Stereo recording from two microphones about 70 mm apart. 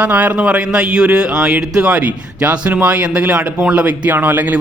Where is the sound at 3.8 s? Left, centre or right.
Right.